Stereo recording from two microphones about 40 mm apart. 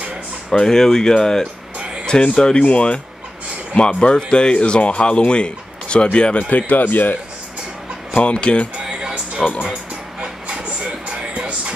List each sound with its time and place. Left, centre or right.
0.5 s speech: centre
6.3 s speech: left
8.2 s speech: left
8.7 s music: right